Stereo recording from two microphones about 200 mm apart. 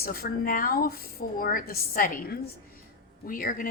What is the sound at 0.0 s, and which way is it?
A woman's voice, 45° left (ahead or behind).